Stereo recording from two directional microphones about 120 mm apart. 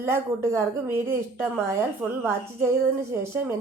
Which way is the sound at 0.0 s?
20° right (ahead or behind).